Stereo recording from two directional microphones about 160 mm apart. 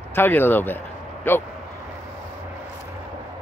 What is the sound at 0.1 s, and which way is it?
Speech, 15° left (ahead or behind).